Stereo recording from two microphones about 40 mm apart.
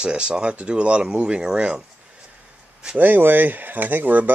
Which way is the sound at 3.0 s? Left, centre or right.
Right.